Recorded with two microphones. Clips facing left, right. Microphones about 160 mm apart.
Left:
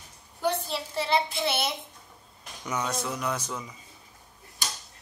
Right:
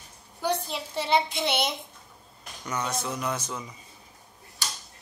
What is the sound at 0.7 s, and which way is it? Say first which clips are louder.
Child singing: right 1 dB; 20° right (ahead or behind).